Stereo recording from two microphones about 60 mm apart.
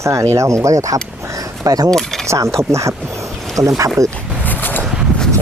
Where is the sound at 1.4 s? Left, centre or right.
Right.